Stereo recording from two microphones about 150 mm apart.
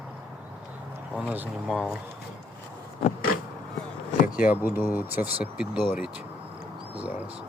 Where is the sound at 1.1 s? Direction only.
10° right (ahead or behind).